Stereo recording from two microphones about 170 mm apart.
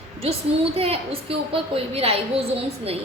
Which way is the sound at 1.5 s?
35° right (ahead or behind).